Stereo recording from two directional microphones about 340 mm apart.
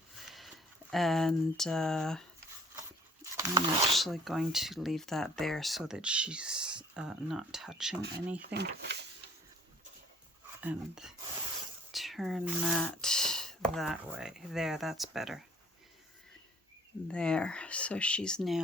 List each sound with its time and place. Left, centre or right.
0.3 s speech: centre
3.3 s speech: centre
3.9 s speech: centre
8.5 s speech: right
10.6 s speech: centre
17.1 s speech: centre